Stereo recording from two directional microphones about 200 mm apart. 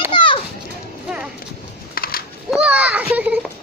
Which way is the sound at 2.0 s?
45° left (ahead or behind).